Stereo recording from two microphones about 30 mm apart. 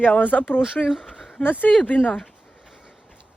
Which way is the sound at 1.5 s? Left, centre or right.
Left.